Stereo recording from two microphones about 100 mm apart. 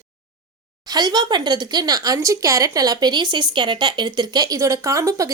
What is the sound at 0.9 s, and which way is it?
Speech, 40° right (ahead or behind).